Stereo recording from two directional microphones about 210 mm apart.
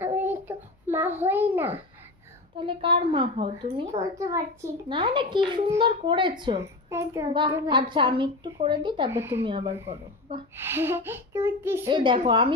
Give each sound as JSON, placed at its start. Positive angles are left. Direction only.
{"t": 0.0, "sound": "a sound", "side_deg": -10}
{"t": 2.5, "sound": "a child's voice", "side_deg": -25}
{"t": 10.6, "sound": "a child's voice", "side_deg": -10}
{"t": 11.9, "sound": "a child's voice", "side_deg": -20}